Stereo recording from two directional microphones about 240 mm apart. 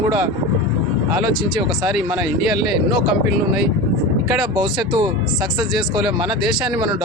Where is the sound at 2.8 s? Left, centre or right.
Centre.